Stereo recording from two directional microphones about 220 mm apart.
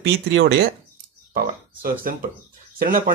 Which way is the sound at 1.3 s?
40° right (ahead or behind).